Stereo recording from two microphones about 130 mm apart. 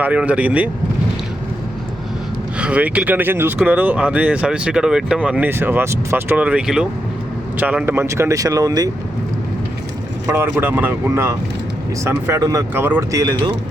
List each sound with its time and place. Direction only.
0.0 s speech: 10° right (ahead or behind)
2.6 s speech: 10° right (ahead or behind); by 8.9 s 30° right (ahead or behind)
10.2 s speech: 20° right (ahead or behind)
12.7 s speech: 15° right (ahead or behind)
13.1 s speech: 25° right (ahead or behind)